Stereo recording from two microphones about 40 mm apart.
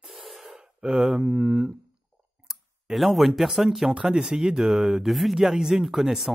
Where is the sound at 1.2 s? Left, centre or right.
Right.